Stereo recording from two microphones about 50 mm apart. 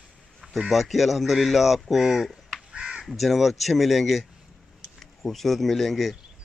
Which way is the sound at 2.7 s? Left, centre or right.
Centre.